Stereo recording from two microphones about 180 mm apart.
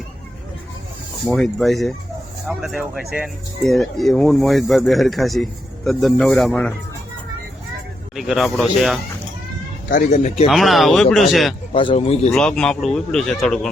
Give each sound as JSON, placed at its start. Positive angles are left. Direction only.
{"t": 1.3, "sound": "speech", "side_deg": 0}
{"t": 8.1, "sound": "speech", "side_deg": 0}
{"t": 9.9, "sound": "speech", "side_deg": 40}
{"t": 10.5, "sound": "speech", "side_deg": 0}
{"t": 11.7, "sound": "speech", "side_deg": 30}
{"t": 12.3, "sound": "speech", "side_deg": 5}